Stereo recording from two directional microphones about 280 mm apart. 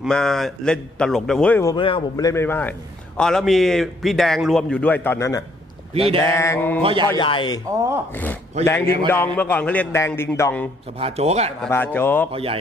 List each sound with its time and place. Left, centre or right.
0.0 s a man's voice: centre
5.9 s a man's voice: centre
6.2 s a man's voice: centre
6.8 s a man's voice: centre
7.1 s a man's voice: centre
8.1 s a man's voice: centre
11.0 s a man's voice: right
11.6 s a man's voice: centre
12.3 s a man's voice: right